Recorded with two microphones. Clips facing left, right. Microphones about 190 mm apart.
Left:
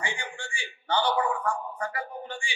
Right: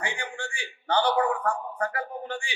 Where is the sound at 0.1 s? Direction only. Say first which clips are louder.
Right 2 dB; 60° right (ahead or behind).